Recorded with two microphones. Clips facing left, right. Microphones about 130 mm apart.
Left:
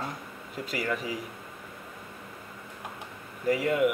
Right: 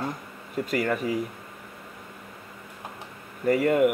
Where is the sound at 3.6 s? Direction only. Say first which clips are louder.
Right 4 dB; 50° right (ahead or behind).